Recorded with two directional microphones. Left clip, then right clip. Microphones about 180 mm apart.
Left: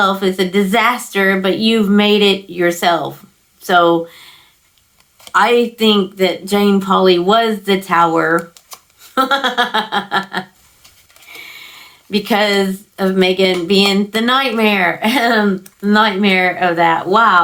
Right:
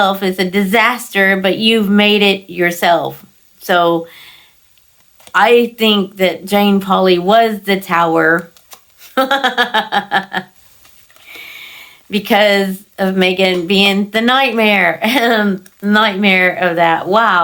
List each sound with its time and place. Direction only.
0.0 s speech: 40° right (ahead or behind)